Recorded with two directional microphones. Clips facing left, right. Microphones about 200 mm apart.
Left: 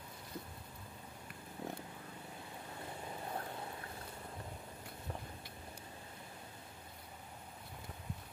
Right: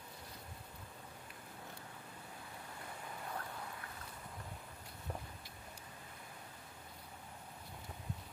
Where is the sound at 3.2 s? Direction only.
25° left (ahead or behind).